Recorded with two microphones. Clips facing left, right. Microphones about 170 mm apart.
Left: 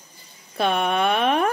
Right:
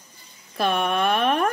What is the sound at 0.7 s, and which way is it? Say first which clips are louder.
Speech: left 1 dB; centre (ahead or behind).